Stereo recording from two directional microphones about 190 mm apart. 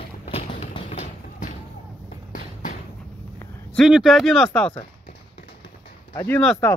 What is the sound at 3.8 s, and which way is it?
Speech, centre (ahead or behind).